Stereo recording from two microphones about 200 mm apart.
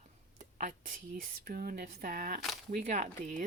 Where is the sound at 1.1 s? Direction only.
45° right (ahead or behind).